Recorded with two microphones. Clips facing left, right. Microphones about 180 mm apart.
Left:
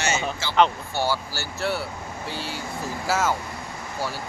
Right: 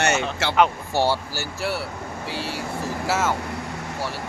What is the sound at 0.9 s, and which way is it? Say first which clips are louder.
Speech: right 5 dB; 30° right (ahead or behind).